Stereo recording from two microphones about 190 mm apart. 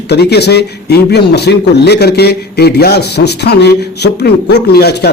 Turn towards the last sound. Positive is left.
turn(degrees=60)  # may be behind; listen again after turning